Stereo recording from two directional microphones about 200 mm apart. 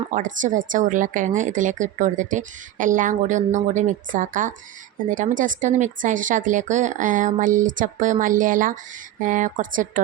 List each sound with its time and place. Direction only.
0.1 s speech: 40° right (ahead or behind)